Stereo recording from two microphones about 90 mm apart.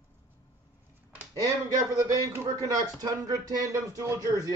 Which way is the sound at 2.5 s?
45° right (ahead or behind).